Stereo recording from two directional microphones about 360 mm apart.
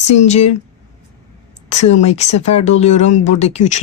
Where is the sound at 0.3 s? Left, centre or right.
Centre.